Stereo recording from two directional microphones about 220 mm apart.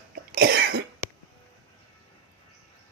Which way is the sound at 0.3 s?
45° right (ahead or behind).